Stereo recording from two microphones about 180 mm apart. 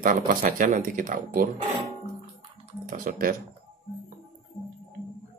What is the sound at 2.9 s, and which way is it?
Speech, 50° right (ahead or behind).